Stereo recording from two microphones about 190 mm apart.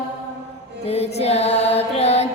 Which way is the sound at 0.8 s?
35° left (ahead or behind).